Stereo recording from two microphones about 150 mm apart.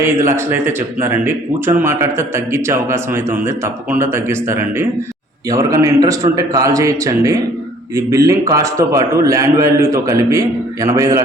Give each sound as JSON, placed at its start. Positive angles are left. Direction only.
{"t": 0.0, "sound": "a man's voice", "side_deg": -20}